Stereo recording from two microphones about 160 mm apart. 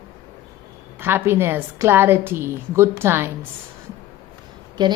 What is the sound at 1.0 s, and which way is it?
A woman's voice, 15° right (ahead or behind).